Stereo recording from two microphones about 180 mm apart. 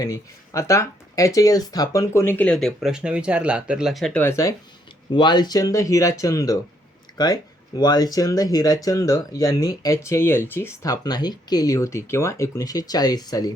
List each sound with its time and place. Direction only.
0.0 s speech: 20° left (ahead or behind)
7.8 s speech: 20° left (ahead or behind)